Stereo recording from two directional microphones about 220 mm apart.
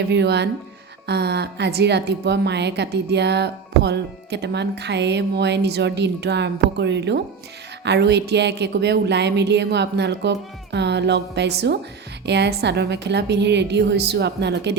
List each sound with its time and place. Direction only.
0.1 s a woman's voice: 50° right (ahead or behind)